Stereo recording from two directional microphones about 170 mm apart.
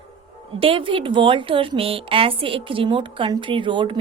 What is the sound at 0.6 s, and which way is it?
A woman's voice, 30° right (ahead or behind).